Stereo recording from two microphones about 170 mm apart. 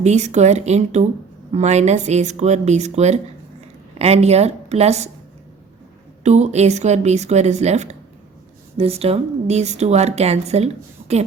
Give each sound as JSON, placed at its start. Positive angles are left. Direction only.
{"t": 0.0, "sound": "speech", "side_deg": -40}
{"t": 6.2, "sound": "speech", "side_deg": -40}